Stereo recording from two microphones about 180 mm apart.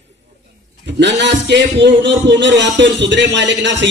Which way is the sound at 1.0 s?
75° right (ahead or behind).